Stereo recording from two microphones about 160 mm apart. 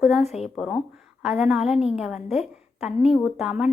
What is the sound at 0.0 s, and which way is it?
A woman's voice, centre (ahead or behind).